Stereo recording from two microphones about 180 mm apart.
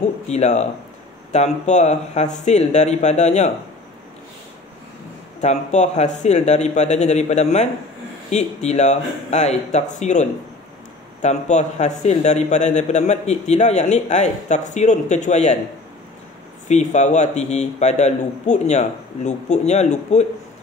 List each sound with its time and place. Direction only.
0.3 s a man's voice: 40° left (ahead or behind)
5.4 s a man's voice: 40° left (ahead or behind)
16.6 s a man's voice: 40° left (ahead or behind)